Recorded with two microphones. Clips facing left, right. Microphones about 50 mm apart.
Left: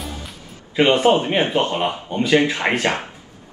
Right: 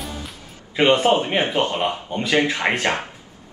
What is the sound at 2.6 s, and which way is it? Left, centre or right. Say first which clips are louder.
Speech: left 1 dB; centre.